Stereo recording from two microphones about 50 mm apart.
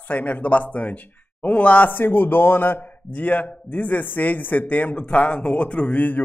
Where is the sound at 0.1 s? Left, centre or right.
Left.